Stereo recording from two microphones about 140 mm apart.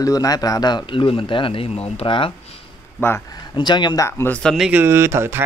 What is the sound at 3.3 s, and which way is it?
Speech, 30° left (ahead or behind).